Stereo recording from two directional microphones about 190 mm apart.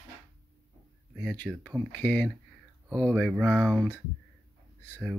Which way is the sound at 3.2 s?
Centre (ahead or behind).